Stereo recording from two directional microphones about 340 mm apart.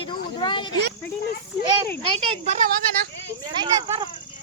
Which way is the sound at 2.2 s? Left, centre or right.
Centre.